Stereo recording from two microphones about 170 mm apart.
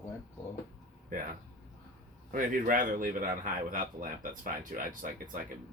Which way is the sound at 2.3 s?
55° right (ahead or behind).